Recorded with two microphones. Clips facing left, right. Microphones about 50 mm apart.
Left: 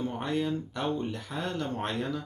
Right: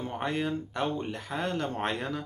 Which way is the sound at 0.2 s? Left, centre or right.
Right.